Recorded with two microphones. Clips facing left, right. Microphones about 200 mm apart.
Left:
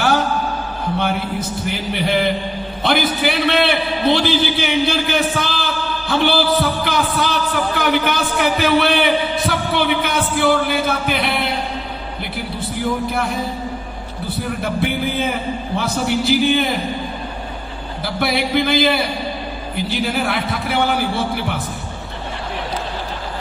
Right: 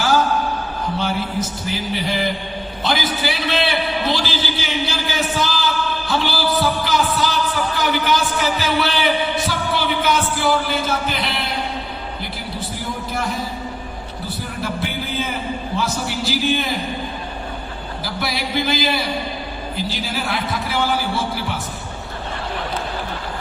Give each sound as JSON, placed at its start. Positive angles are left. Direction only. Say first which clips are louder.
{"t": 0.9, "sound": "a man's voice", "louder": "left 2 dB", "side_deg": 60}
{"t": 6.8, "sound": "music", "louder": "left 1 dB", "side_deg": 60}
{"t": 7.8, "sound": "a man's voice", "louder": "left 1 dB", "side_deg": 55}
{"t": 9.5, "sound": "music", "louder": "left 3 dB", "side_deg": 60}
{"t": 14.6, "sound": "a man's voice", "louder": "left 4 dB", "side_deg": 55}
{"t": 18.0, "sound": "a man's voice", "louder": "left 6 dB", "side_deg": 60}